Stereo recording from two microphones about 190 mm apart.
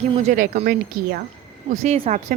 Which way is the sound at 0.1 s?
35° right (ahead or behind).